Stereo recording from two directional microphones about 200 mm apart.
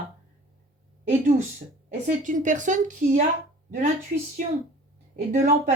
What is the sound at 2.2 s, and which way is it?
Speech, 40° right (ahead or behind).